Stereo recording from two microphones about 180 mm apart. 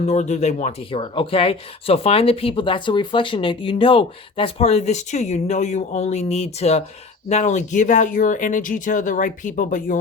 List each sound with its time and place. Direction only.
0.0 s speech: 40° left (ahead or behind)